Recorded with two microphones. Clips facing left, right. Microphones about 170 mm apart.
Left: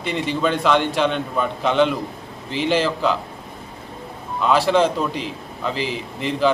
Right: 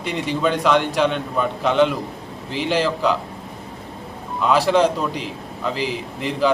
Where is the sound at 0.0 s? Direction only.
5° right (ahead or behind).